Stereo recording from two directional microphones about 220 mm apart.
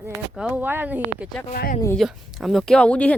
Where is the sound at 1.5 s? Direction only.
40° left (ahead or behind).